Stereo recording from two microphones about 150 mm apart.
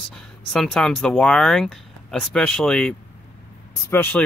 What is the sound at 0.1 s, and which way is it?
Speech, centre (ahead or behind).